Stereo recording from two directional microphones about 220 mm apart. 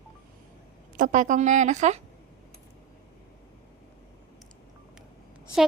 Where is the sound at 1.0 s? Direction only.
35° right (ahead or behind).